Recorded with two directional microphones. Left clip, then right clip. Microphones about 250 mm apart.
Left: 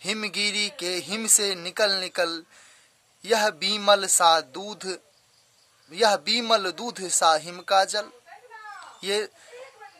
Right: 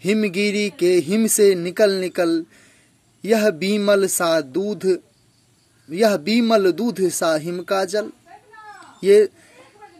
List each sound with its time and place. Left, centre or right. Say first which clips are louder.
0.0 s a man's voice: right 6 dB; centre